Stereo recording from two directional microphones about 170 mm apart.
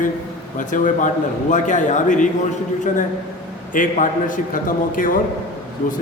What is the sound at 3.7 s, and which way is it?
Speech, 50° left (ahead or behind).